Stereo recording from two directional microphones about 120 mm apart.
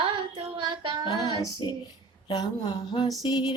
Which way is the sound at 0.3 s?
45° right (ahead or behind).